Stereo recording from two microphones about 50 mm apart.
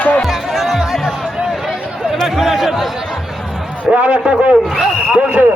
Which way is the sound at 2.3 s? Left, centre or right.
Centre.